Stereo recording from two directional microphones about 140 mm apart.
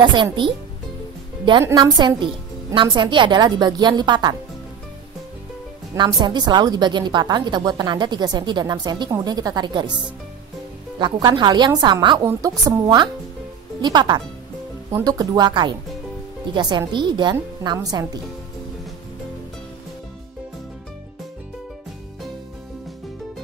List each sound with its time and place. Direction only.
0.0 s a woman's voice: 35° right (ahead or behind)
1.6 s a woman's voice: 25° right (ahead or behind)
5.9 s a woman's voice: 35° right (ahead or behind)
11.0 s a woman's voice: 30° right (ahead or behind)